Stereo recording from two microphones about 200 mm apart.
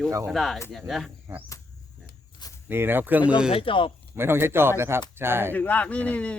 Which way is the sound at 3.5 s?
25° left (ahead or behind).